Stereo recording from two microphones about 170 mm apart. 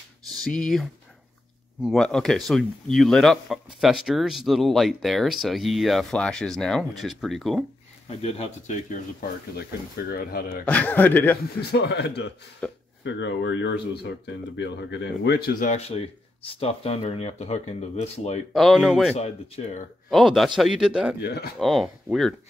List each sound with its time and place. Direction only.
0.4 s speech: 5° left (ahead or behind)
8.2 s speech: 35° left (ahead or behind)
9.6 s speech: 65° left (ahead or behind)
10.7 s speech: 10° left (ahead or behind)
11.7 s speech: 85° left
12.6 s speech: 5° left (ahead or behind)
13.0 s speech: 90° left; by 15.7 s 65° left (ahead or behind)
15.7 s speech: 35° left (ahead or behind)
18.5 s speech: centre (ahead or behind)
19.1 s speech: 40° left (ahead or behind)
20.1 s speech: centre (ahead or behind)
21.2 s speech: 70° left (ahead or behind)
21.5 s speech: centre (ahead or behind)